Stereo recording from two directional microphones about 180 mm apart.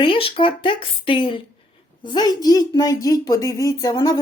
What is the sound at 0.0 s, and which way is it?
Speech, 30° left (ahead or behind).